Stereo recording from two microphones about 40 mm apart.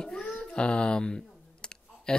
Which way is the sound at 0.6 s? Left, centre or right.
Left.